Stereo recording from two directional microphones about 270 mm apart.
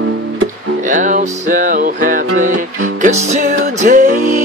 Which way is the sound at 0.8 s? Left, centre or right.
Right.